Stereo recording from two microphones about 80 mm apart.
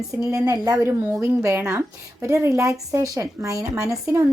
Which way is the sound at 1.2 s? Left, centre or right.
Right.